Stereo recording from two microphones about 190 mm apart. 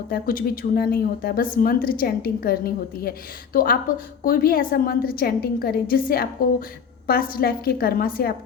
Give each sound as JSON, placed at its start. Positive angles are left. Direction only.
{"t": 0.1, "sound": "a woman's voice", "side_deg": 50}